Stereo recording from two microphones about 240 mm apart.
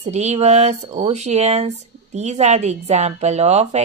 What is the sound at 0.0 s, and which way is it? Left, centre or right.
A woman's voice, right.